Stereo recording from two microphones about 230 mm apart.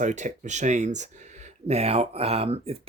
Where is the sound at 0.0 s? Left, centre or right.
Right.